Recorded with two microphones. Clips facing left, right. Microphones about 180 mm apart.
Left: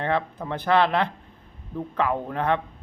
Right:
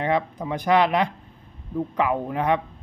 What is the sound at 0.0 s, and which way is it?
Speech, 15° right (ahead or behind).